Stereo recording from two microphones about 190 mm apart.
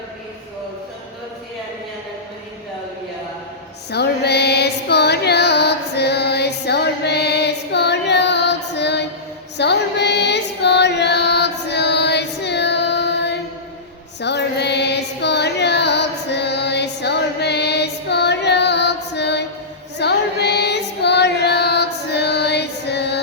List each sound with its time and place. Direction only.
3.9 s music: 60° left (ahead or behind)